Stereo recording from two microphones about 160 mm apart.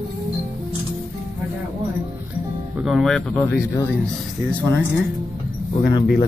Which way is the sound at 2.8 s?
Centre (ahead or behind).